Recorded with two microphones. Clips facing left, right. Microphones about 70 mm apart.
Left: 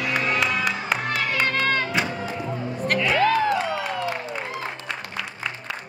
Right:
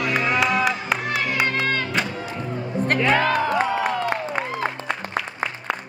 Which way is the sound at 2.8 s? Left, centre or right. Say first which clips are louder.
Right 1 dB; right.